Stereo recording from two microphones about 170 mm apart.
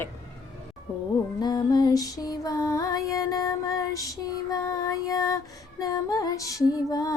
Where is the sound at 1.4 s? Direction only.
25° left (ahead or behind).